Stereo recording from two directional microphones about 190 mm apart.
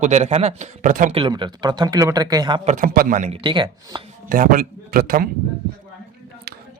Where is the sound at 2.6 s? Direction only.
45° right (ahead or behind).